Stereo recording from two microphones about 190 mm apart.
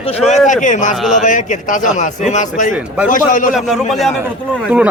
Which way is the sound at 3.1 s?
45° left (ahead or behind).